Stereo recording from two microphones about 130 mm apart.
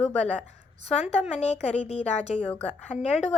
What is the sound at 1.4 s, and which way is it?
A woman's voice, 55° left (ahead or behind).